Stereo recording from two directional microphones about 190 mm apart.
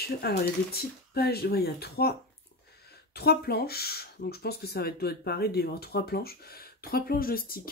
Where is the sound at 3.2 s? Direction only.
55° left (ahead or behind).